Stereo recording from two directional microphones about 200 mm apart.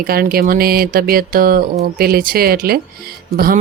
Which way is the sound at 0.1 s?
45° right (ahead or behind).